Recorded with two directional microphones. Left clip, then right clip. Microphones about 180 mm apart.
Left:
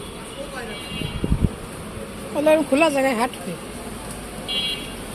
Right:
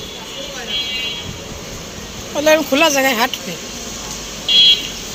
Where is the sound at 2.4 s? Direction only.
10° left (ahead or behind).